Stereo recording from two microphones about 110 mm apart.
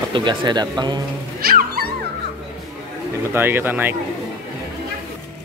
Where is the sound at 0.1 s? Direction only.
45° right (ahead or behind).